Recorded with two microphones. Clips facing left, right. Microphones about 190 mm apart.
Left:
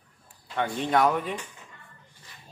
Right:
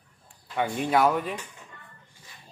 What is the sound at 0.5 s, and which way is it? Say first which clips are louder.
Speech: right 1 dB; 10° right (ahead or behind).